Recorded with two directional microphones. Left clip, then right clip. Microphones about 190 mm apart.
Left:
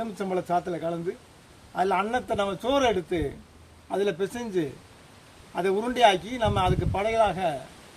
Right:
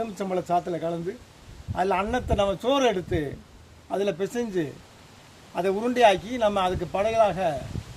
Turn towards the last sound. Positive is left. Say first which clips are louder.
# right 2 dB
turn(degrees=-15)  # may be behind; listen again after turning